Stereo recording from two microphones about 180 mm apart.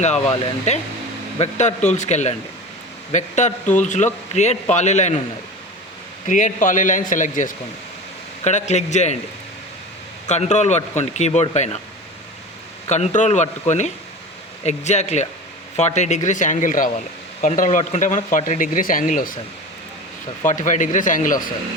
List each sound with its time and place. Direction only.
0.7 s a man's voice: 40° left (ahead or behind)
6.2 s a man's voice: 45° left (ahead or behind)
10.2 s a man's voice: 40° left (ahead or behind)
12.9 s a man's voice: 40° left (ahead or behind)
20.4 s a man's voice: 45° left (ahead or behind)